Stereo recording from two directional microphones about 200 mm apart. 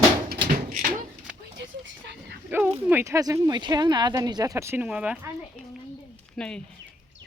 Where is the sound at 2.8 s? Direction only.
15° right (ahead or behind).